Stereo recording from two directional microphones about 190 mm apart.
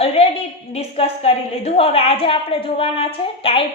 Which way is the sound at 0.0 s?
30° left (ahead or behind).